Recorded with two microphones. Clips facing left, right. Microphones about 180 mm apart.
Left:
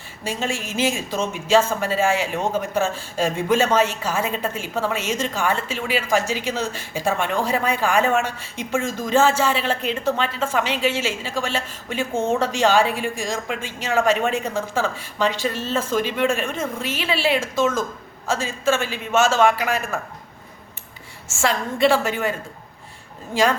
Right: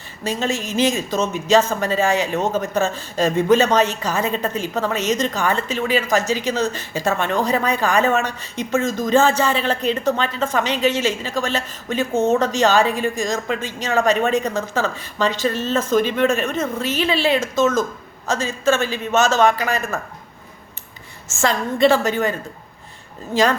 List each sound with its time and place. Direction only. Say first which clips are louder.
0.3 s a man's voice: right 4 dB; 10° left (ahead or behind)
6.2 s speech: right 4 dB; 40° right (ahead or behind)
6.5 s a man's voice: right 4 dB; 10° left (ahead or behind)
21.4 s a man's voice: right 3 dB; 10° left (ahead or behind)
23.3 s a man's voice: right 2 dB; 10° left (ahead or behind)